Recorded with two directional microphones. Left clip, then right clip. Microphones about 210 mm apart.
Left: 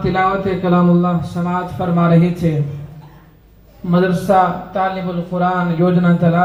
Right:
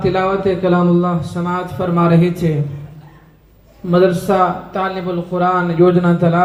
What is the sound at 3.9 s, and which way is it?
Speech, 20° right (ahead or behind).